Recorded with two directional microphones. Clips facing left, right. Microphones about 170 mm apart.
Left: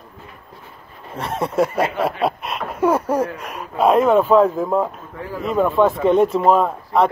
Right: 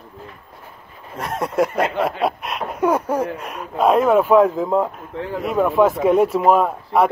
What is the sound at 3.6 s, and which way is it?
Speech, 5° left (ahead or behind).